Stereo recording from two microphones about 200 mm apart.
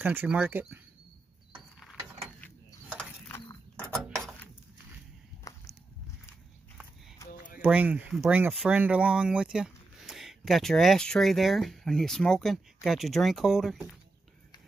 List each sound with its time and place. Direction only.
0.0 s speech: 10° right (ahead or behind)
3.3 s a sound: 10° left (ahead or behind)
5.5 s walk: 15° left (ahead or behind)
7.6 s speech: 5° right (ahead or behind)